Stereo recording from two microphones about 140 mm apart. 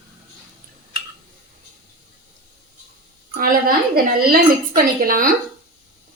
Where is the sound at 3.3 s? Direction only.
90° right.